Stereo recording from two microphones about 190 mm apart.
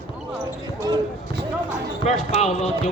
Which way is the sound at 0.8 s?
20° right (ahead or behind).